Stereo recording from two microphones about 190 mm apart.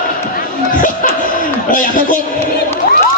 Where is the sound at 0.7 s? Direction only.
45° left (ahead or behind).